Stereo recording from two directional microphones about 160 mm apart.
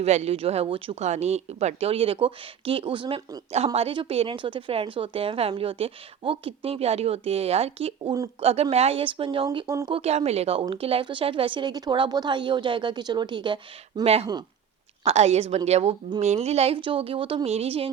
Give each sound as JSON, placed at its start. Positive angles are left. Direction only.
{"t": 0.0, "sound": "speech", "side_deg": -45}
{"t": 9.6, "sound": "speech", "side_deg": -20}
{"t": 9.9, "sound": "speech", "side_deg": -40}